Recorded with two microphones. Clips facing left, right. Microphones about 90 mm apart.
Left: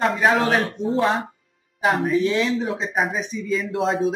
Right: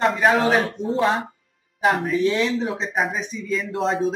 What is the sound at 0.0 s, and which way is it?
Speech, centre (ahead or behind).